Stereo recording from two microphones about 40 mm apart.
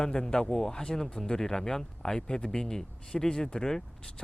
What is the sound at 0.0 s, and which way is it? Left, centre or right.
Speech, centre.